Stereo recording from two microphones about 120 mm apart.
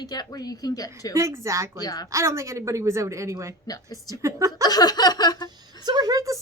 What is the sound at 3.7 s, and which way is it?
Speech, 30° left (ahead or behind).